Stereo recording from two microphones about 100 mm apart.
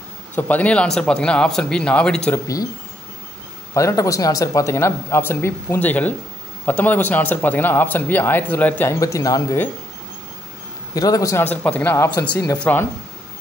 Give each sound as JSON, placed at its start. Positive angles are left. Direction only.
{"t": 0.4, "sound": "speech", "side_deg": 15}
{"t": 2.3, "sound": "speech", "side_deg": 35}
{"t": 3.7, "sound": "speech", "side_deg": 30}
{"t": 9.0, "sound": "speech", "side_deg": 35}
{"t": 11.0, "sound": "speech", "side_deg": 35}
{"t": 11.3, "sound": "speech", "side_deg": 15}